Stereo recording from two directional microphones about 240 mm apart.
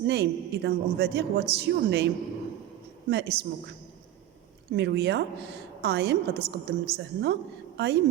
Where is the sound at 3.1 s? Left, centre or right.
Right.